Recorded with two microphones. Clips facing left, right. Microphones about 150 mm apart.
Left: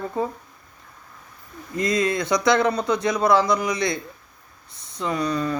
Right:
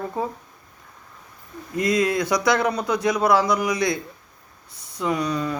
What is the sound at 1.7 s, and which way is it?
Speech, 10° right (ahead or behind).